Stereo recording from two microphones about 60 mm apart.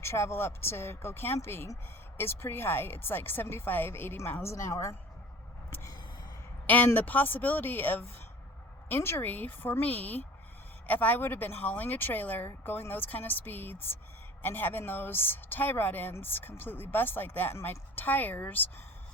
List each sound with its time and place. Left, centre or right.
0.0 s speech: left
4.5 s speech: left
6.7 s speech: left
9.2 s speech: left